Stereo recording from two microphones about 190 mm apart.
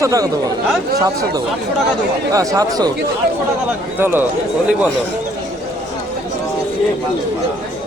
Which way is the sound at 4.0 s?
10° right (ahead or behind).